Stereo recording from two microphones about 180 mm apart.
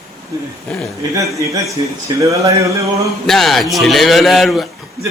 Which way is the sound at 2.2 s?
15° right (ahead or behind).